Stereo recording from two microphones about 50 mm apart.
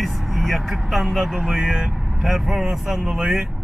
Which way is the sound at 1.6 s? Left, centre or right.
Centre.